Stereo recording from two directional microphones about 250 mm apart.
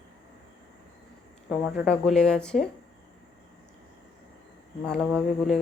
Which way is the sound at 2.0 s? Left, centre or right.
Centre.